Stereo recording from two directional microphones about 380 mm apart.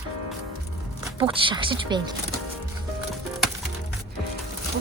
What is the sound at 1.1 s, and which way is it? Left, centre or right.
Speech, centre.